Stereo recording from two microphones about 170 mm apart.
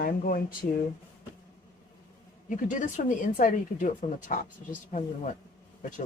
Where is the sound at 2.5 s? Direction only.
50° left (ahead or behind).